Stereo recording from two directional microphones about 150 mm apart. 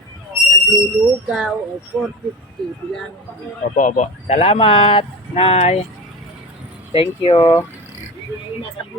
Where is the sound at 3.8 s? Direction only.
55° left (ahead or behind).